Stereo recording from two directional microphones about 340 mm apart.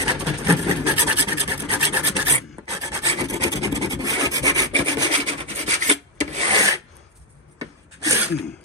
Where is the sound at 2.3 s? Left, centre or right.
Centre.